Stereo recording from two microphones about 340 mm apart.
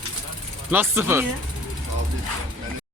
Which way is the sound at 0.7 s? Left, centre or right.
Centre.